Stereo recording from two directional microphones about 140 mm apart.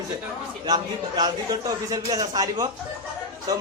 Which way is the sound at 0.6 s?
30° right (ahead or behind).